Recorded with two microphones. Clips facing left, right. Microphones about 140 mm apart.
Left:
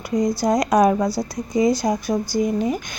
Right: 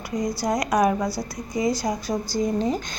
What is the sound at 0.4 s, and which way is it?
Speech, 20° left (ahead or behind).